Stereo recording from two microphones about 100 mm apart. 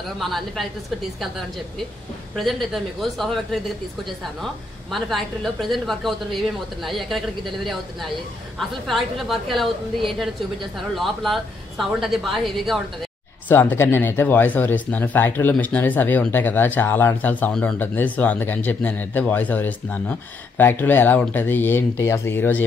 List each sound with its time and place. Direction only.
0.2 s a woman's voice: centre (ahead or behind)
2.3 s a woman's voice: centre (ahead or behind)
4.9 s a woman's voice: centre (ahead or behind)
13.5 s speech: 20° left (ahead or behind)